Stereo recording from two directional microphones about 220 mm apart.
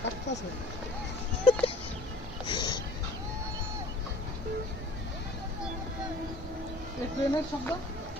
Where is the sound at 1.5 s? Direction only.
25° left (ahead or behind).